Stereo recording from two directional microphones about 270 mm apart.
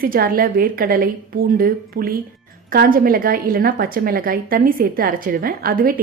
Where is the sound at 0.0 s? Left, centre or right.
Right.